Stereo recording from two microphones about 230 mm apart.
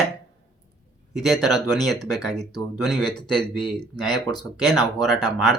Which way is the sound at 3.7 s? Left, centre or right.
Centre.